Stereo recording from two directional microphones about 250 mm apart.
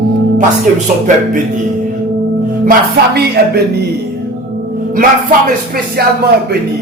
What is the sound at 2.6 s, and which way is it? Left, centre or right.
Music, right.